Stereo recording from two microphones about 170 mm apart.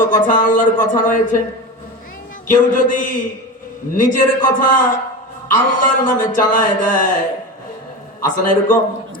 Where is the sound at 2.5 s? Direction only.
50° left (ahead or behind).